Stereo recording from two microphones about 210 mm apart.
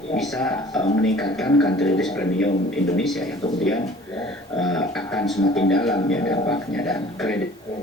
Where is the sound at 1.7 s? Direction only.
Centre (ahead or behind).